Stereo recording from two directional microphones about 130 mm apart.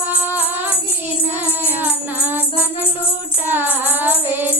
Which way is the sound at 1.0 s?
15° right (ahead or behind).